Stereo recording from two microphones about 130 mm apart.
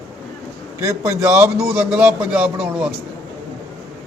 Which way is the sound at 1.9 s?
10° right (ahead or behind).